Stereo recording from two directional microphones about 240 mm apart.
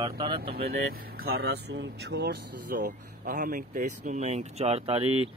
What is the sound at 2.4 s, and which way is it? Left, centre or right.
Speech, right.